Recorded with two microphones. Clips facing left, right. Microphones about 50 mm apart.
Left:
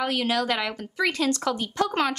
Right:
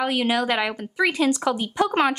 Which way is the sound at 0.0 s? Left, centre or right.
Centre.